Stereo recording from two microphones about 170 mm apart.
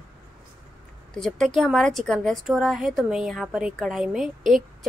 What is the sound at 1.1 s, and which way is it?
A woman's voice, centre (ahead or behind).